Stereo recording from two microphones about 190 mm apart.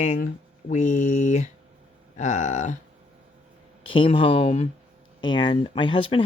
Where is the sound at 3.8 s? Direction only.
25° left (ahead or behind).